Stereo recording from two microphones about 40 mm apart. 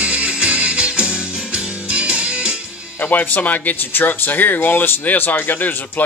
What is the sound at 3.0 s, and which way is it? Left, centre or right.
Speech, left.